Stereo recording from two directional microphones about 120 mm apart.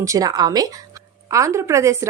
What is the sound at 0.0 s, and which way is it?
A woman's voice, 30° right (ahead or behind).